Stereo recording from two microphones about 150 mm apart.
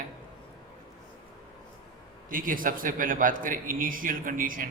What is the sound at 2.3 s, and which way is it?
A man's voice, 65° right (ahead or behind).